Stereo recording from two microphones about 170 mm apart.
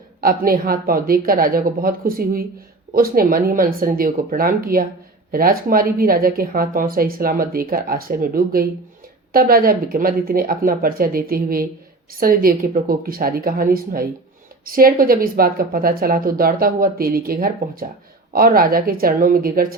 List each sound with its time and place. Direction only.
0.2 s a woman's voice: 60° right (ahead or behind)